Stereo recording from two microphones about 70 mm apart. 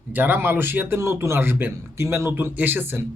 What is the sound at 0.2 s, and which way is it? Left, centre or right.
A man's voice, right.